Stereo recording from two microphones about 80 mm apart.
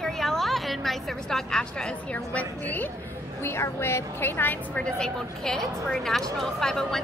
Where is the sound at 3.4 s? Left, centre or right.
Left.